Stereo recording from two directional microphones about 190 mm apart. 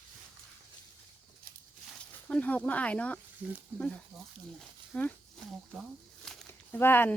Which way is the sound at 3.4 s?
10° right (ahead or behind).